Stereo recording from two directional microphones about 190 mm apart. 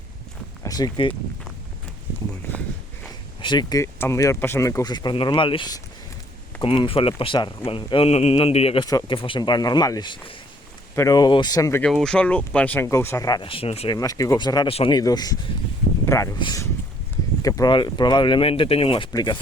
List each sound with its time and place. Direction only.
0.6 s speech: 20° left (ahead or behind)
3.4 s speech: 20° left (ahead or behind)
11.8 s speech: centre (ahead or behind); by 13.9 s 30° left (ahead or behind)
13.9 s speech: 20° left (ahead or behind)